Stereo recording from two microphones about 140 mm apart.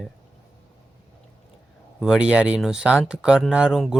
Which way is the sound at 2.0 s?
5° right (ahead or behind).